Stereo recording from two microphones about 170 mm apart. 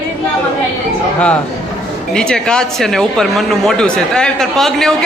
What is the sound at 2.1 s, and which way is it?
Speech, 5° left (ahead or behind).